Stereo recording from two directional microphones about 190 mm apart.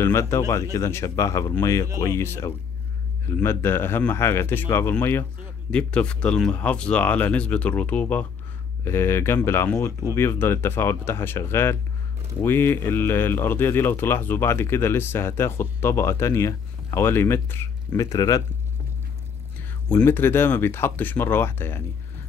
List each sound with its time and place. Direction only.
0.0 s speech: 15° left (ahead or behind)
19.9 s speech: 10° left (ahead or behind)